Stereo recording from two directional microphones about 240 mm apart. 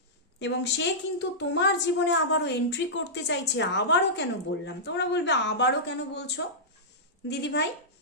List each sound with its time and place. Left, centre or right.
0.3 s a woman's voice: left